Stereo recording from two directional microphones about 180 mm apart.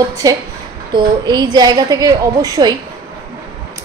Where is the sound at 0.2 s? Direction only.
20° right (ahead or behind).